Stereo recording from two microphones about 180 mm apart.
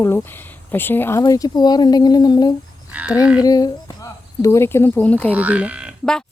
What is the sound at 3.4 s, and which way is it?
Speech, 20° left (ahead or behind).